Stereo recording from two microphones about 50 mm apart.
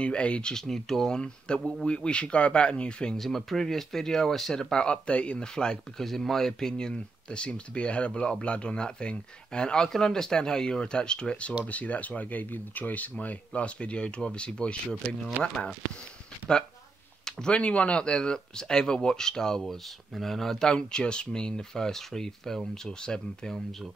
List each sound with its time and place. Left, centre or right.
0.0 s speech: left
3.2 s speech: centre; by 15.7 s left
17.2 s speech: centre